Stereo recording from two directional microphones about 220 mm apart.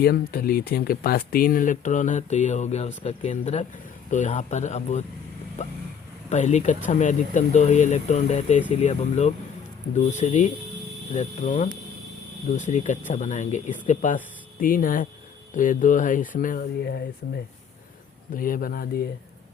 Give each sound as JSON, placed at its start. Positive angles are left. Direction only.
{"t": 0.0, "sound": "speech", "side_deg": 45}
{"t": 5.6, "sound": "vehicle", "side_deg": 30}
{"t": 6.3, "sound": "speech", "side_deg": 30}